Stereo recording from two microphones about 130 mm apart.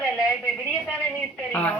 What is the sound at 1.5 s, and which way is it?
Telephone, 10° left (ahead or behind).